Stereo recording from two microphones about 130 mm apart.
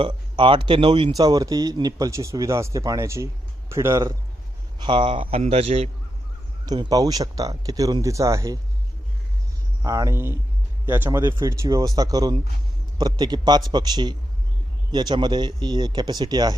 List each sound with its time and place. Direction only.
0.0 s speech: 40° right (ahead or behind)
1.1 s speech: 30° right (ahead or behind)
4.8 s a man's voice: 40° right (ahead or behind)
6.7 s speech: 30° right (ahead or behind)
9.8 s speech: 25° right (ahead or behind)